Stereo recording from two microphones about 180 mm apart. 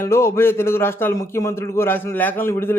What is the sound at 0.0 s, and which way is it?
Speech, 15° left (ahead or behind).